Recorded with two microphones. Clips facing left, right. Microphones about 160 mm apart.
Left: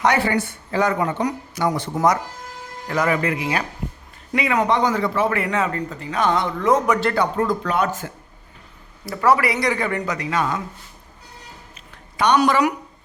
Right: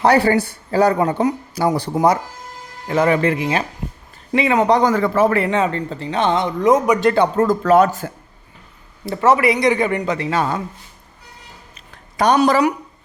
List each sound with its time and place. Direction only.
0.0 s speech: 35° right (ahead or behind); by 7.2 s 15° right (ahead or behind)
7.3 s speech: 45° right (ahead or behind)
9.0 s speech: 25° right (ahead or behind)
12.1 s a woman's voice: 40° right (ahead or behind)